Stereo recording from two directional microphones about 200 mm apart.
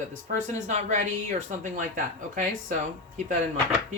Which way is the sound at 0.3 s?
35° right (ahead or behind).